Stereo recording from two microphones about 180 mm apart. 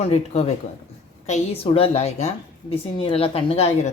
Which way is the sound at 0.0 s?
35° left (ahead or behind).